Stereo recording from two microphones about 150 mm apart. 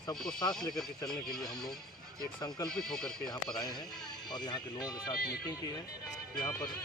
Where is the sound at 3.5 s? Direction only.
25° left (ahead or behind).